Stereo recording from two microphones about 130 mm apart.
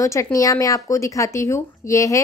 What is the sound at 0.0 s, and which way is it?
Speech, 25° left (ahead or behind).